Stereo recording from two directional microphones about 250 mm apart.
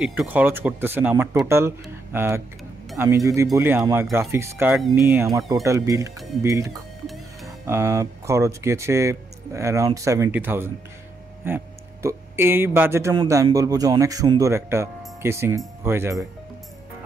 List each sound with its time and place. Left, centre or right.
0.0 s speech: centre